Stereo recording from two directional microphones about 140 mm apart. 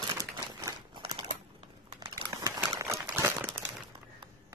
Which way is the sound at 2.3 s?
25° right (ahead or behind).